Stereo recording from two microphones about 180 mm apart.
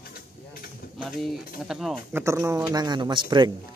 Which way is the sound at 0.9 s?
Centre (ahead or behind).